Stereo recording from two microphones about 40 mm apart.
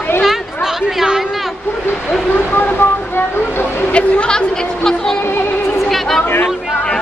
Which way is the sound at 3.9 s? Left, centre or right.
Left.